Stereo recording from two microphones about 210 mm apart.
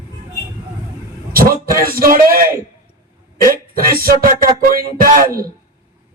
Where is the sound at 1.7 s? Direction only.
45° right (ahead or behind).